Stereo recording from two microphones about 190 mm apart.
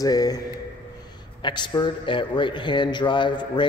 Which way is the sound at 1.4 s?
25° left (ahead or behind).